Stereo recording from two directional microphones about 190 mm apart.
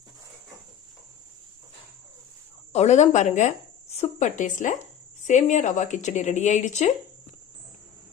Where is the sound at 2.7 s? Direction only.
35° left (ahead or behind).